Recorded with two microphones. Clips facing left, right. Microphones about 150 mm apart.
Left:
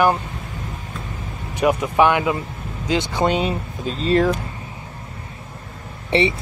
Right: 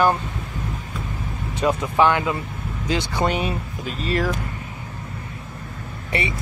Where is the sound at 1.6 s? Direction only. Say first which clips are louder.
Left 2 dB; 15° left (ahead or behind).